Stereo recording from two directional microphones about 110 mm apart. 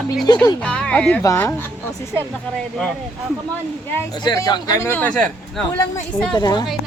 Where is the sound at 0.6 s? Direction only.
10° left (ahead or behind).